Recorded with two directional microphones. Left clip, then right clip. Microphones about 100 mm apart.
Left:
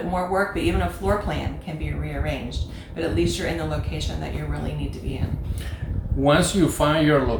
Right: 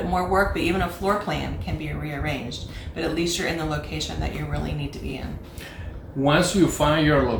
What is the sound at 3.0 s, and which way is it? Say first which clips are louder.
Speech: left 1 dB; 35° right (ahead or behind).